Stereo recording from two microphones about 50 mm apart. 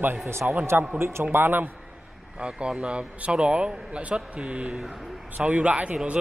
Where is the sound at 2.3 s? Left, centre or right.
Centre.